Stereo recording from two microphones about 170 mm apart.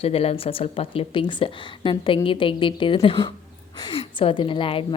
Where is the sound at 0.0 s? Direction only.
35° left (ahead or behind).